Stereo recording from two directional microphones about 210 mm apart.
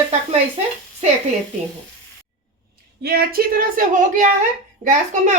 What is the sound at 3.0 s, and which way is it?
A woman's voice, 45° right (ahead or behind).